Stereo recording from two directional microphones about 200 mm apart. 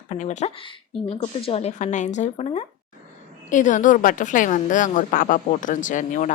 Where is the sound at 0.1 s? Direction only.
35° left (ahead or behind).